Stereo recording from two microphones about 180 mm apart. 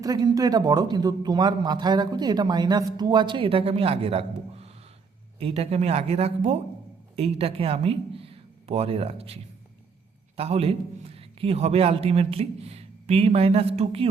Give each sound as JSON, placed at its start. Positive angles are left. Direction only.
{"t": 0.0, "sound": "a man's voice", "side_deg": -20}